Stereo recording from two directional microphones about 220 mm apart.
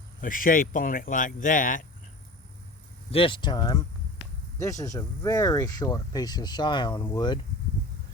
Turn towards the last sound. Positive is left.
turn(degrees=20)  # may be behind; listen again after turning